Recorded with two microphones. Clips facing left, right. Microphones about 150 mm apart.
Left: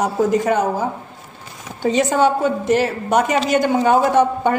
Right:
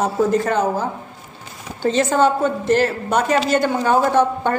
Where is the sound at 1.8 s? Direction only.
15° left (ahead or behind).